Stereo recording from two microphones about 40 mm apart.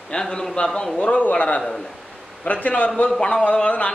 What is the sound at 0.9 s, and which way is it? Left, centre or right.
A man's voice, left.